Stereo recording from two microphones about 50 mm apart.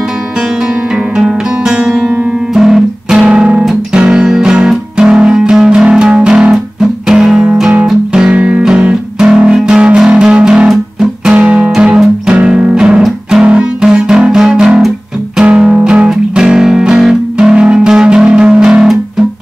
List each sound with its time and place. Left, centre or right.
1.1 s music: centre
6.5 s music: centre
7.2 s music: centre
8.3 s music: right; by 15.8 s centre
15.8 s music: centre